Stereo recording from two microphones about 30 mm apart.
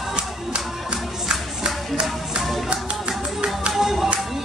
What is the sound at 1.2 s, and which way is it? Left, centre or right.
Music, right.